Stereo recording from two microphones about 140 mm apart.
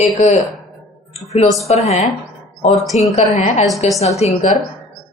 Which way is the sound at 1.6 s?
50° left (ahead or behind).